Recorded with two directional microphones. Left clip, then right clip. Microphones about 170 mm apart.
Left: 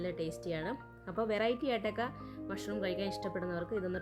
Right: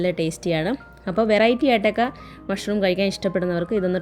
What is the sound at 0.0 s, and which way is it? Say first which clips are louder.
Speech: right 15 dB; 20° right (ahead or behind).